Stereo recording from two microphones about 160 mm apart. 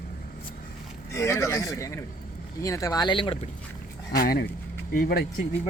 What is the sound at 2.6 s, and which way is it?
Speech, 20° left (ahead or behind).